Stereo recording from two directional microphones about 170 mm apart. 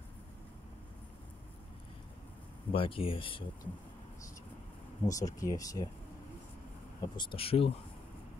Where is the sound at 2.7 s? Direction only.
30° left (ahead or behind).